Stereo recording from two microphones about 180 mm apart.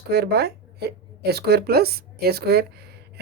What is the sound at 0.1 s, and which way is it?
Speech, 65° right (ahead or behind).